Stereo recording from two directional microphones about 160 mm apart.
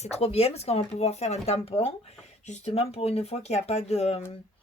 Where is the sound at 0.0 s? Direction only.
40° left (ahead or behind).